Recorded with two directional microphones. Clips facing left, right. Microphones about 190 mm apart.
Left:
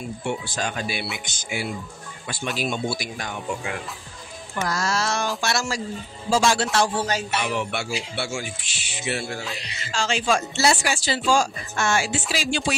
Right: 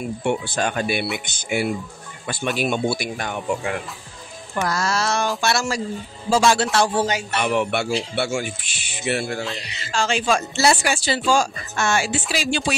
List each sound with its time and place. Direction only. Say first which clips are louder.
0.2 s speech: right 5 dB; 60° right (ahead or behind)
4.6 s speech: right 2 dB; 60° right (ahead or behind)